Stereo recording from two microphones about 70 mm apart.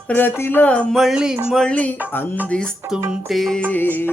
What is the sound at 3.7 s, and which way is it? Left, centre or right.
Music, left.